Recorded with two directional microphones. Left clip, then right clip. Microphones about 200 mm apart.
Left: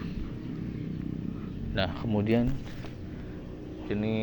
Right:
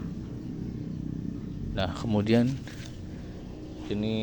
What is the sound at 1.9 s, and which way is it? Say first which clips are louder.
Speech: right 5 dB; 30° right (ahead or behind).